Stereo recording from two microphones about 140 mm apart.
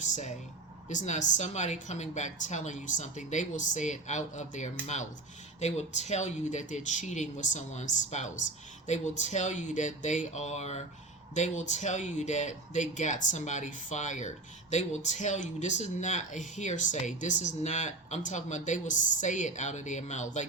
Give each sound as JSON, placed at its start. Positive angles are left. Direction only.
{"t": 0.0, "sound": "speech", "side_deg": 60}